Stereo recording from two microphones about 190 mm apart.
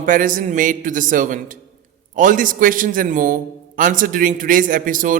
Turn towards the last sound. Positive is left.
turn(degrees=-45)  # may be behind; listen again after turning